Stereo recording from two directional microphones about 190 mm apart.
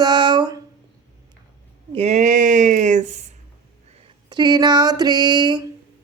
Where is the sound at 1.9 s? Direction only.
35° right (ahead or behind).